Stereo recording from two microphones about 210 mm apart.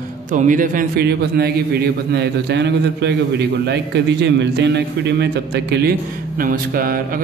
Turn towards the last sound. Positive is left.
turn(degrees=-45)  # may be behind; listen again after turning